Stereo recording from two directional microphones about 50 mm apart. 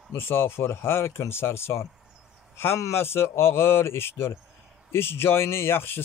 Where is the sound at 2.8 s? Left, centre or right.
Left.